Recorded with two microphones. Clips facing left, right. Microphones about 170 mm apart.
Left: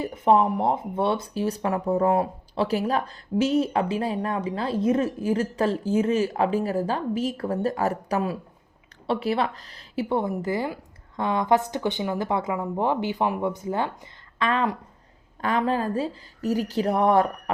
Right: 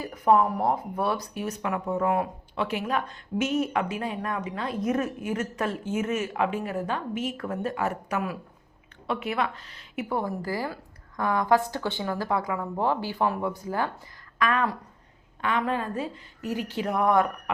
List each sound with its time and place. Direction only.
0.0 s speech: 25° left (ahead or behind)
15.4 s speech: 35° left (ahead or behind)